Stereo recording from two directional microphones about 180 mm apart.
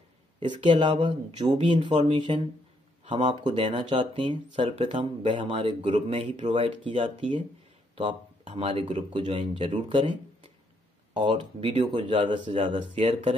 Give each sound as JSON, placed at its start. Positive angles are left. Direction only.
{"t": 0.4, "sound": "speech", "side_deg": -25}
{"t": 11.2, "sound": "speech", "side_deg": -25}